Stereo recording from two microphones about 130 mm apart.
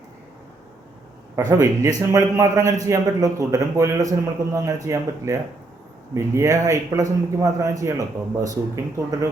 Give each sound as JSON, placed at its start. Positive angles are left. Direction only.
{"t": 1.4, "sound": "a man's voice", "side_deg": -25}